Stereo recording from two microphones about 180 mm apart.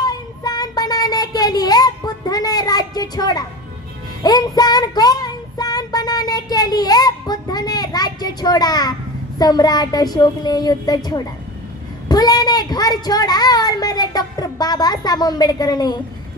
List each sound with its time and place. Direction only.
0.0 s child singing: 20° left (ahead or behind)
9.4 s a child's voice: 20° left (ahead or behind)